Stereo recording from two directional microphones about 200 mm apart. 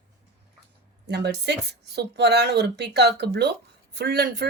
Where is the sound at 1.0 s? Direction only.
55° right (ahead or behind).